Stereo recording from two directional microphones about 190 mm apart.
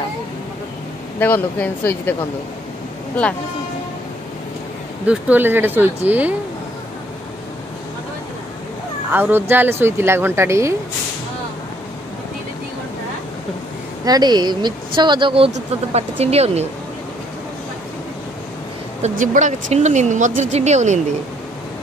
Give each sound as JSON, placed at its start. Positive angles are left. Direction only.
{"t": 1.2, "sound": "speech", "side_deg": 10}
{"t": 5.0, "sound": "speech", "side_deg": -5}
{"t": 9.1, "sound": "speech", "side_deg": -10}
{"t": 14.0, "sound": "speech", "side_deg": -20}
{"t": 19.0, "sound": "speech", "side_deg": -40}